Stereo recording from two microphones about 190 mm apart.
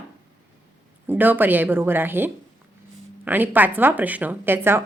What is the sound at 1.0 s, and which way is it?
A woman's voice, 10° right (ahead or behind).